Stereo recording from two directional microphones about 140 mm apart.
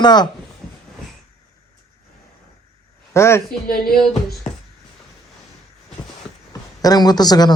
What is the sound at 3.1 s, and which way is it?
Speech, 20° left (ahead or behind).